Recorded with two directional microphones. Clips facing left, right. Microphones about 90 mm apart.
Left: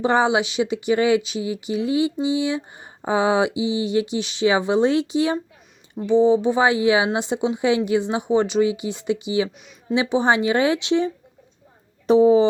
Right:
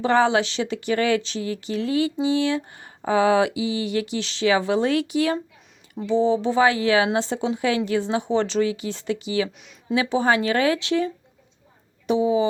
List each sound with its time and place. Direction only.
0.0 s speech: 20° left (ahead or behind)
12.0 s speech: 35° left (ahead or behind)